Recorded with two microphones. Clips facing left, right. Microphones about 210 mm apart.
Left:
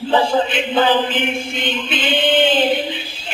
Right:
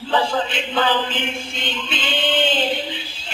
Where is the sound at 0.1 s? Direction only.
20° left (ahead or behind).